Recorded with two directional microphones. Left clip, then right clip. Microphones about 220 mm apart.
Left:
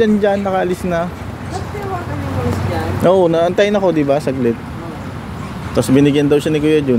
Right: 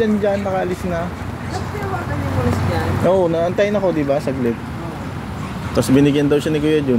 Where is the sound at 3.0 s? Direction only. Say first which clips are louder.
Left 4 dB; 50° left (ahead or behind).